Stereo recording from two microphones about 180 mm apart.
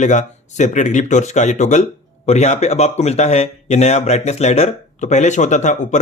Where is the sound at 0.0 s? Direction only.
40° left (ahead or behind).